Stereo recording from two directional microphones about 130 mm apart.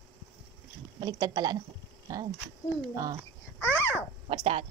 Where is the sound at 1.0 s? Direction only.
30° right (ahead or behind).